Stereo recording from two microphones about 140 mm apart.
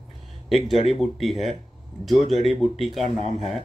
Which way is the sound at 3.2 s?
50° right (ahead or behind).